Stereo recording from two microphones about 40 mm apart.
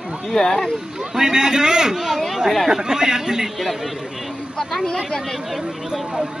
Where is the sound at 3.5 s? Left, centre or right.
Centre.